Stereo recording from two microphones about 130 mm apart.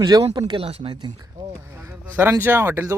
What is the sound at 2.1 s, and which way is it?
Speech, 20° right (ahead or behind).